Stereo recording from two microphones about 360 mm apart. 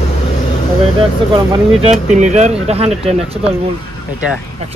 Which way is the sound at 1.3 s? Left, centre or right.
Centre.